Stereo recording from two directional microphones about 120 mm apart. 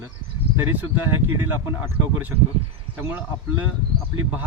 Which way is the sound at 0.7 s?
15° right (ahead or behind).